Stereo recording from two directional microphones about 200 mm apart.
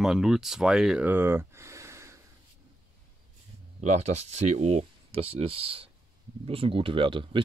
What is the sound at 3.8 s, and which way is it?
Speech, 35° right (ahead or behind).